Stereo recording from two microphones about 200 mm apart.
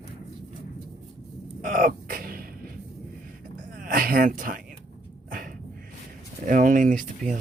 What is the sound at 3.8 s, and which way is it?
Speech, 45° right (ahead or behind).